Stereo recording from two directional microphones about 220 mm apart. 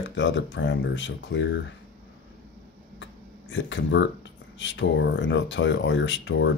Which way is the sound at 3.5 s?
55° left (ahead or behind).